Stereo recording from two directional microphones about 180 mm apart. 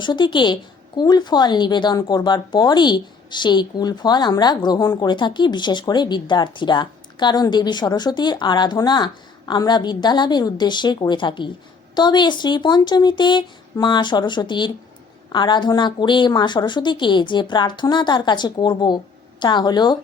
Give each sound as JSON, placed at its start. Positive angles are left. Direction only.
{"t": 0.0, "sound": "a woman's voice", "side_deg": 25}